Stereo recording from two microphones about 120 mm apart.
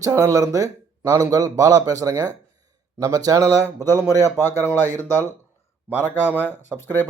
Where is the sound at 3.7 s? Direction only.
20° left (ahead or behind).